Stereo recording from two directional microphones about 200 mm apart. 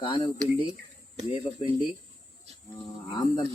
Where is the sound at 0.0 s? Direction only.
25° left (ahead or behind).